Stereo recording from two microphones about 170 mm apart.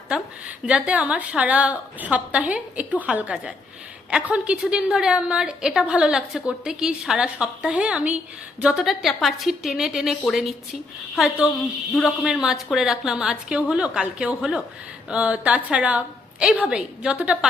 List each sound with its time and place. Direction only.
0.1 s a woman's voice: 5° right (ahead or behind)